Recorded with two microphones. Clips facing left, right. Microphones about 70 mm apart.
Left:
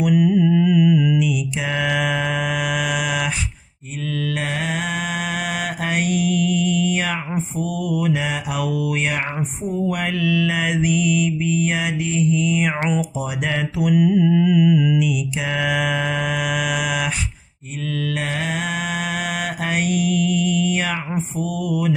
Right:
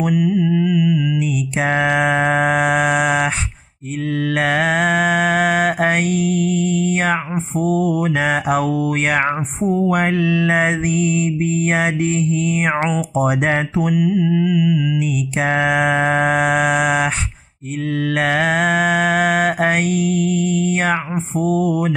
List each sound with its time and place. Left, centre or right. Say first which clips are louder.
0.1 s mantra: left 1 dB; centre
1.2 s mantra: right 3 dB; right
13.9 s music: left 2 dB; centre
15.0 s mantra: right 2 dB; right